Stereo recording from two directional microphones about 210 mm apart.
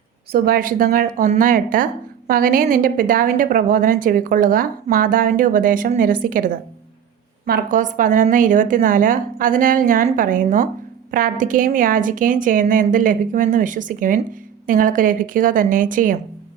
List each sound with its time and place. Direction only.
0.3 s speech: 45° right (ahead or behind)